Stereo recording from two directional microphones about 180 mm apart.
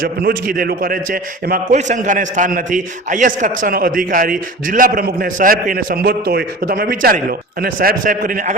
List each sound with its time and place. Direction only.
0.0 s a man's voice: 55° right (ahead or behind)